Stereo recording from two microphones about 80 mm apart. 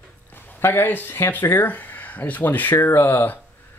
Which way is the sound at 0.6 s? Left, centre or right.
Left.